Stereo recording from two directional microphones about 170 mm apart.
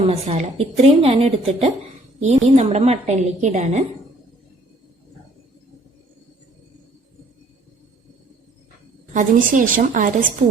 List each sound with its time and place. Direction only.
0.1 s a woman's voice: 40° right (ahead or behind)
9.1 s a woman's voice: 50° right (ahead or behind)